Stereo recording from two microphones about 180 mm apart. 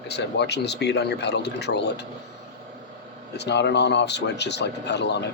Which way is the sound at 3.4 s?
70° left (ahead or behind).